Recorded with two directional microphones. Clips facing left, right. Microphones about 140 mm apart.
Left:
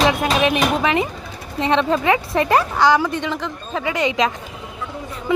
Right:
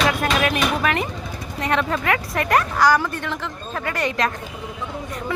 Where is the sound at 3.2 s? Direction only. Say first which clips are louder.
Left 3 dB; 15° left (ahead or behind).